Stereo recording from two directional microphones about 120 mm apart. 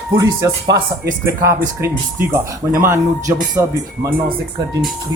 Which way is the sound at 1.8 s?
25° right (ahead or behind).